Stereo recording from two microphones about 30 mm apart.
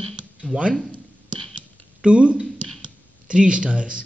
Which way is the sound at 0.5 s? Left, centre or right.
Right.